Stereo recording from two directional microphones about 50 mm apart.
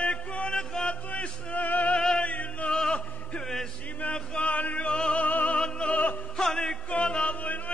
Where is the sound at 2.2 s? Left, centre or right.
Left.